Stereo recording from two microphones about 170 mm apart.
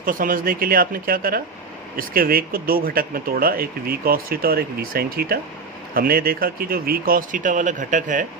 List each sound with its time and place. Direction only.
0.0 s speech: 55° right (ahead or behind)